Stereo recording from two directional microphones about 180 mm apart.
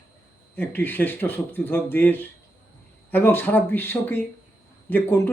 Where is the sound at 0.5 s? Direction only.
10° left (ahead or behind).